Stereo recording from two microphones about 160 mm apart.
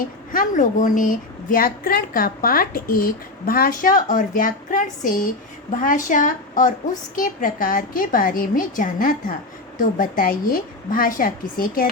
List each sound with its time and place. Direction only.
0.0 s a woman's voice: 55° left (ahead or behind)